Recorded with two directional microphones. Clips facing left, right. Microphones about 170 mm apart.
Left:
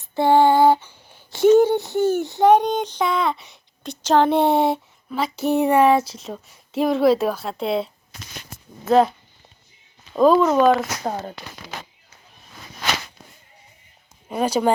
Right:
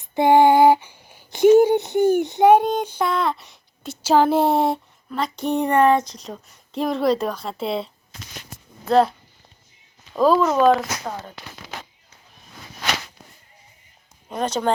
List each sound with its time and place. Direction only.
0.0 s a sound: 15° right (ahead or behind)
2.5 s a child's voice: 5° right (ahead or behind)
8.9 s speech: centre (ahead or behind)
10.2 s speech: centre (ahead or behind)
14.3 s speech: 10° left (ahead or behind)